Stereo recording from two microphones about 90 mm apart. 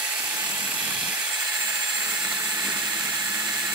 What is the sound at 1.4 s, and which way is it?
Tools, 50° right (ahead or behind).